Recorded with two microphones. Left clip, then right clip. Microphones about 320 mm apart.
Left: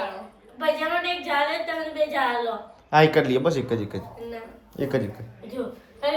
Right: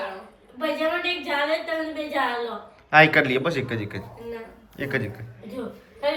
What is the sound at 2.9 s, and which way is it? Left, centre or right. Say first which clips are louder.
Speech: right 2 dB; centre.